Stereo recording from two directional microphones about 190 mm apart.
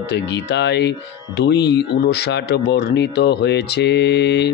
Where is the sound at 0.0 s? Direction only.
65° left (ahead or behind).